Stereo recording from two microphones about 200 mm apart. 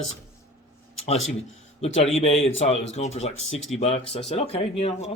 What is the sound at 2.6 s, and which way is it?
Speech, 35° left (ahead or behind).